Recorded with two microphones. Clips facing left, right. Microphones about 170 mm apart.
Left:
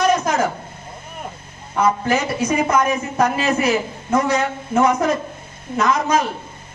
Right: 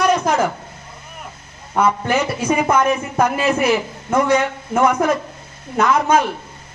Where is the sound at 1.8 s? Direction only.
55° right (ahead or behind).